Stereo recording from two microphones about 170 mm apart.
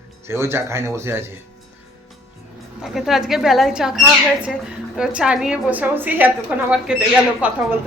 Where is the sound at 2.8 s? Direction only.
Centre (ahead or behind).